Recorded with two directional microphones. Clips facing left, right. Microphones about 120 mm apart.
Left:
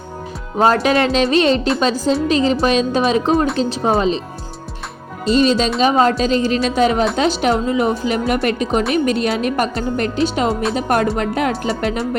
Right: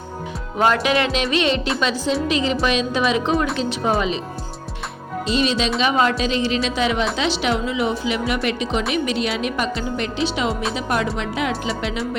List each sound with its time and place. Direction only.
0.6 s speech: 35° left (ahead or behind)
5.3 s a woman's voice: 40° left (ahead or behind)
10.5 s speech: centre (ahead or behind)
10.8 s a woman's voice: 50° left (ahead or behind)